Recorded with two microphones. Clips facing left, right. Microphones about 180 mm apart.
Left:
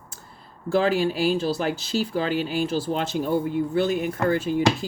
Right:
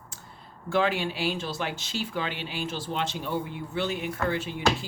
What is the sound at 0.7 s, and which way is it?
Speech, 35° left (ahead or behind).